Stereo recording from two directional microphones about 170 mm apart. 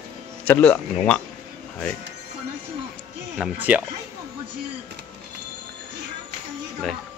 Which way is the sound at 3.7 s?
10° right (ahead or behind).